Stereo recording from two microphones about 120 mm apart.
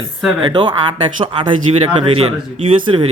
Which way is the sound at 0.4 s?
40° right (ahead or behind).